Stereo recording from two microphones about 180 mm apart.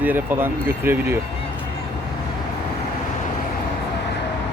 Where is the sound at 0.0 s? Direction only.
10° right (ahead or behind).